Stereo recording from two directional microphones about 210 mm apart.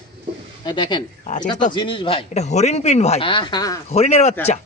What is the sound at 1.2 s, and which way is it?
Speech, 35° left (ahead or behind).